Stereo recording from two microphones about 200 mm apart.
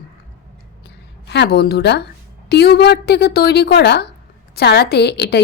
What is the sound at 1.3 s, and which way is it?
A woman's voice, 55° left (ahead or behind).